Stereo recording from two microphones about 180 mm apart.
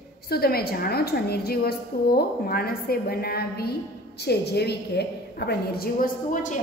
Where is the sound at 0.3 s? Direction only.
60° left (ahead or behind).